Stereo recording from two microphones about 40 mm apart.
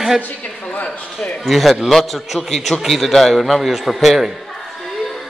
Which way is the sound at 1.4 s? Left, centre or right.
Centre.